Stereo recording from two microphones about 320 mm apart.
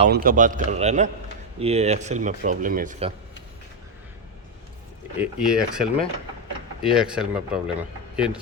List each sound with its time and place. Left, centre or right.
0.0 s speech: right
5.1 s speech: centre